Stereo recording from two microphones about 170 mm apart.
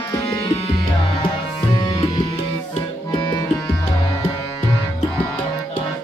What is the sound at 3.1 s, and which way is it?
Tabla, 25° left (ahead or behind).